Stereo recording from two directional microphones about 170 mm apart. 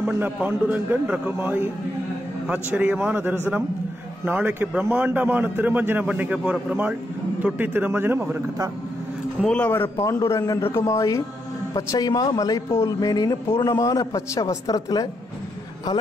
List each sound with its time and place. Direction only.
0.0 s a man's voice: 10° right (ahead or behind)
9.4 s a man's voice: 5° left (ahead or behind)